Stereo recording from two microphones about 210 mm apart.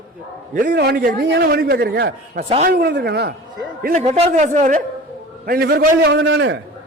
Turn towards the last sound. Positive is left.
turn(degrees=-55)  # may be behind; listen again after turning